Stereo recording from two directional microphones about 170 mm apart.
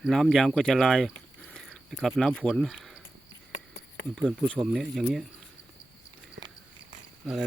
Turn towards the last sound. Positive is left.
turn(degrees=0)  # may be behind; listen again after turning